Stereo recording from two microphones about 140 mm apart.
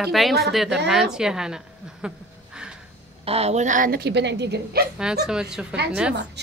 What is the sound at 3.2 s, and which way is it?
Speech, 45° right (ahead or behind).